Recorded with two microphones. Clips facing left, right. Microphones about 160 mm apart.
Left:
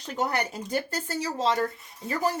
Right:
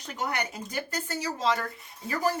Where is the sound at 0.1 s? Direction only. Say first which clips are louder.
Left 4 dB; 35° left (ahead or behind).